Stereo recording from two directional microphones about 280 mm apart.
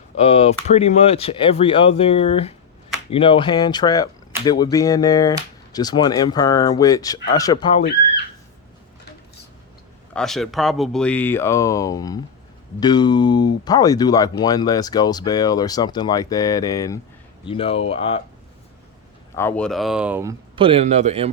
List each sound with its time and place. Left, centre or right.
0.2 s speech: left
10.2 s speech: centre
19.4 s speech: centre
20.6 s a man's voice: centre